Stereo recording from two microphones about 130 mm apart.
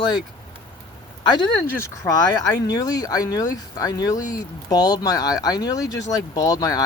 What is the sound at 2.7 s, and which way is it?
Speech, 30° left (ahead or behind).